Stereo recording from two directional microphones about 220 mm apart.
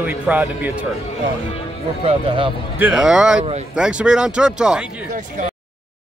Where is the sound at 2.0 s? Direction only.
25° right (ahead or behind).